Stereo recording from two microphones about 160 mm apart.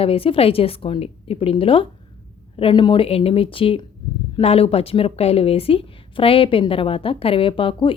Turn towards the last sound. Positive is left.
turn(degrees=35)  # may be behind; listen again after turning